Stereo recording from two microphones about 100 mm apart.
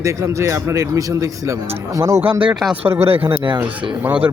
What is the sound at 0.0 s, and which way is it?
Speech, 30° right (ahead or behind).